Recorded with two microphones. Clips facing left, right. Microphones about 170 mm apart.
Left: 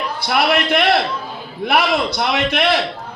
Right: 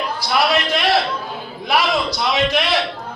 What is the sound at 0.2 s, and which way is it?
A man's voice, 60° left (ahead or behind).